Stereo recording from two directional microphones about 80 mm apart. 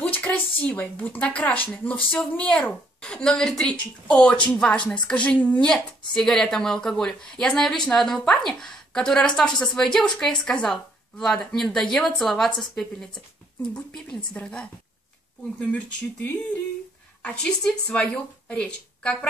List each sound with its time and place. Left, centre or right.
0.0 s a woman's voice: centre
15.7 s speech: left
17.2 s a woman's voice: centre